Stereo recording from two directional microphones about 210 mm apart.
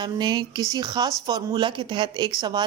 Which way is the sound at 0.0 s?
20° right (ahead or behind).